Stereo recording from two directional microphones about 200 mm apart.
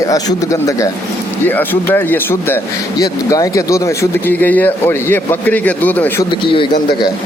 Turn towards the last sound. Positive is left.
turn(degrees=25)  # may be behind; listen again after turning